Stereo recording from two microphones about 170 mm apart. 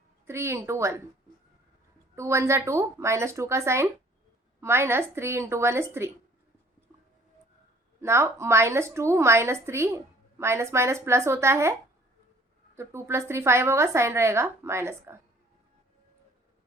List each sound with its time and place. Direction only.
0.3 s a woman's voice: 15° right (ahead or behind)
2.1 s a woman's voice: 15° right (ahead or behind)
8.0 s a woman's voice: 15° right (ahead or behind)
12.7 s a woman's voice: 15° right (ahead or behind)